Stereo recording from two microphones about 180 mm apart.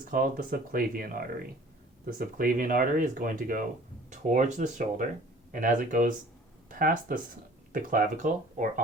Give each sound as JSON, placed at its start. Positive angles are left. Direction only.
{"t": 0.0, "sound": "speech", "side_deg": -50}